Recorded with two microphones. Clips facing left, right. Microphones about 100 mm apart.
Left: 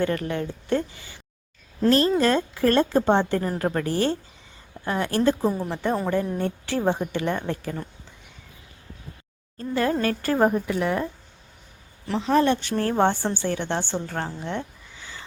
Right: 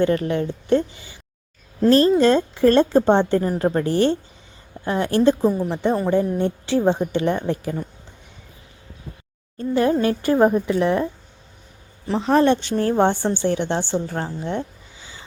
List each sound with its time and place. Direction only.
0.0 s a woman's voice: 20° right (ahead or behind)
1.9 s a woman's voice: 30° right (ahead or behind)
9.6 s a woman's voice: 20° right (ahead or behind)
12.2 s speech: 35° right (ahead or behind)
12.5 s a woman's voice: 20° right (ahead or behind)
14.2 s a woman's voice: 5° right (ahead or behind)